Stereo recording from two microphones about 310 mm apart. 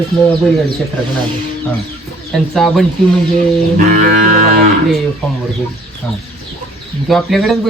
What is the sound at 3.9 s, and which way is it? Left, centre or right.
Moo, right.